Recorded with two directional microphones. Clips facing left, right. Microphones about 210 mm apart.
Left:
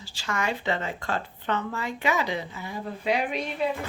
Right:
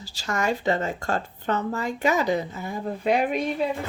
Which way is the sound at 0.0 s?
40° right (ahead or behind).